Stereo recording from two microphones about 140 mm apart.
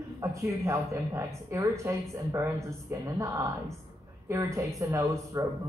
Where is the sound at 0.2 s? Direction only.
20° right (ahead or behind).